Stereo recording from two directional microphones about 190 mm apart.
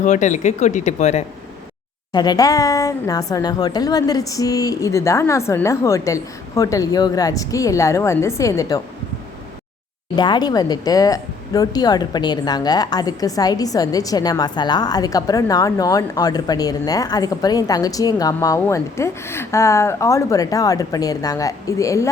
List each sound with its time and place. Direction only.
0.0 s speech: 40° left (ahead or behind)
2.1 s a woman's voice: 20° left (ahead or behind)
10.2 s a woman's voice: 20° left (ahead or behind)